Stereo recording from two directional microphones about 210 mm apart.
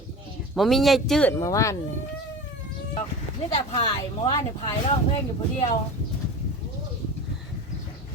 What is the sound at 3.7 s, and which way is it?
Speech, 25° left (ahead or behind).